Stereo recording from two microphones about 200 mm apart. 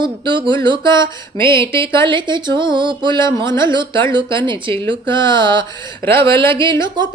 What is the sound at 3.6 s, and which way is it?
Speech, 25° right (ahead or behind).